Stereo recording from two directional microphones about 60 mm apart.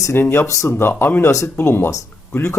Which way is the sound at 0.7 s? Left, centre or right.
Left.